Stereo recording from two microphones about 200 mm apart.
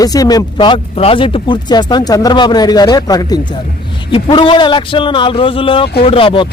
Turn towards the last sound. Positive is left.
turn(degrees=25)  # may be behind; listen again after turning